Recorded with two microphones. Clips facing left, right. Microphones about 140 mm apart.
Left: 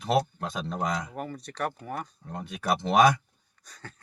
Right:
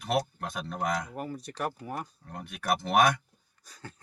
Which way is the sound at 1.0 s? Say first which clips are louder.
Even; centre (ahead or behind).